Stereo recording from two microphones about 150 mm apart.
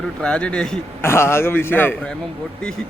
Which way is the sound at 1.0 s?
15° left (ahead or behind).